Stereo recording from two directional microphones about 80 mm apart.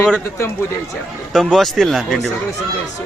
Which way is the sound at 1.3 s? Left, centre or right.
Centre.